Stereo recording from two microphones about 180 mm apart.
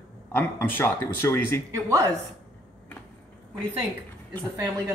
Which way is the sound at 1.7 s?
15° right (ahead or behind).